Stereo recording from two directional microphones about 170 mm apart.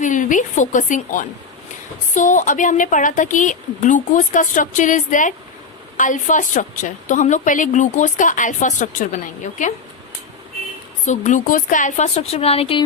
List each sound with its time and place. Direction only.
0.0 s a woman's voice: 50° left (ahead or behind)
11.0 s a woman's voice: 45° left (ahead or behind)